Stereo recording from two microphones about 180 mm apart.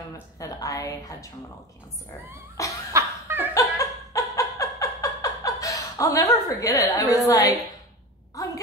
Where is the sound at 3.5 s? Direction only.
20° left (ahead or behind).